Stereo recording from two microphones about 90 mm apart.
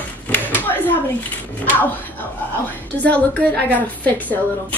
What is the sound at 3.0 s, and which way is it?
A woman's voice, 15° left (ahead or behind).